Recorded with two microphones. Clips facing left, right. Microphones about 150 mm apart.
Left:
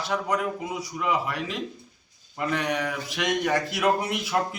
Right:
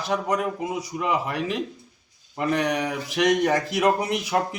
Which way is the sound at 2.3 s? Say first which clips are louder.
Right 3 dB; 40° right (ahead or behind).